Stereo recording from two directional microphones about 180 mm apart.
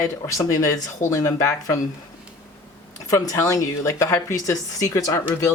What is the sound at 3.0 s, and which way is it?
Speech, 20° left (ahead or behind).